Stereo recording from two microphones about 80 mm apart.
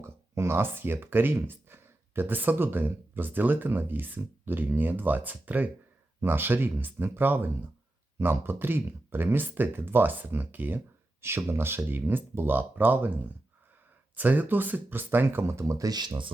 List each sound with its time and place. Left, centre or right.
0.0 s speech: right
14.2 s speech: right